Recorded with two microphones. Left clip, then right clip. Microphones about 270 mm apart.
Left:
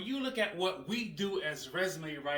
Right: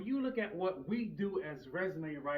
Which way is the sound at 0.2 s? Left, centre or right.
Centre.